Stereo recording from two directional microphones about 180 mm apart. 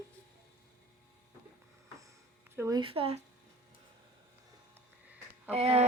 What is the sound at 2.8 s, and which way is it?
Speech, 30° right (ahead or behind).